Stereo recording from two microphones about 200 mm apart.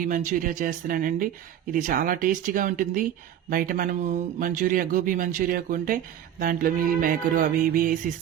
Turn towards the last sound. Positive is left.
turn(degrees=-45)  # may be behind; listen again after turning